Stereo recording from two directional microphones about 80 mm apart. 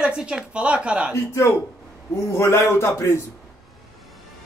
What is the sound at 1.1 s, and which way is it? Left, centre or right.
A man's voice, left.